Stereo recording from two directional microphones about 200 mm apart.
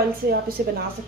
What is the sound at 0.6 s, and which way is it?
Speech, 50° right (ahead or behind).